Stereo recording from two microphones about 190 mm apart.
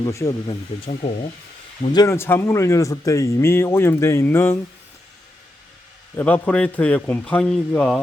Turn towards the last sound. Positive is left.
turn(degrees=5)  # may be behind; listen again after turning